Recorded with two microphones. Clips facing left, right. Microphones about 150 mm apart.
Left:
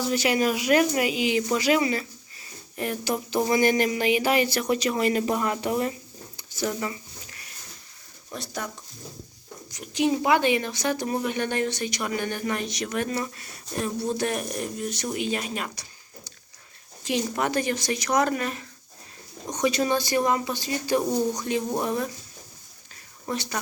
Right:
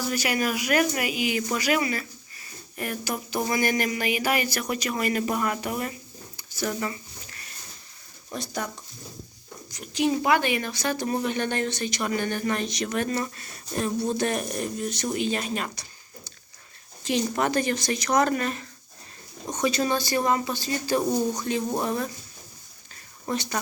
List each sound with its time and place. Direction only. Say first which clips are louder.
0.0 s a sound: left 3 dB; 25° left (ahead or behind)
8.3 s speech: right 2 dB; centre (ahead or behind)
9.7 s speech: left 1 dB; 20° left (ahead or behind)
21.0 s speech: even; 5° right (ahead or behind)
23.3 s speech: right 1 dB; 5° left (ahead or behind)